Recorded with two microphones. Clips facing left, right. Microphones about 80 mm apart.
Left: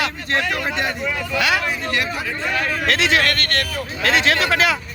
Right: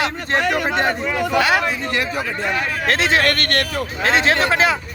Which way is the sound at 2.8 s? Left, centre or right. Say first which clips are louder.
Right 2 dB; right.